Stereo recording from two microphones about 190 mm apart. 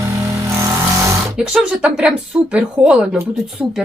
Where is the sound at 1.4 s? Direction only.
5° right (ahead or behind).